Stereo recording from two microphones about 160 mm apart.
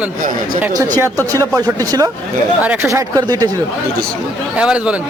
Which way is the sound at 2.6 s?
10° right (ahead or behind).